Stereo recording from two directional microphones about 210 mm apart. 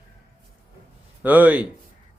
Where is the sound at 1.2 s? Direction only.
10° right (ahead or behind).